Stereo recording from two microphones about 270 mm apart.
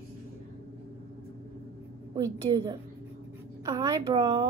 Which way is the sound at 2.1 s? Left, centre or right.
Centre.